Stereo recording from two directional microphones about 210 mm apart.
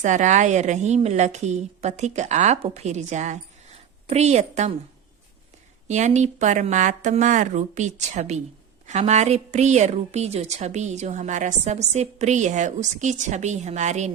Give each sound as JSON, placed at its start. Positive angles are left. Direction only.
{"t": 0.0, "sound": "a woman's voice", "side_deg": -35}
{"t": 5.9, "sound": "a woman's voice", "side_deg": -35}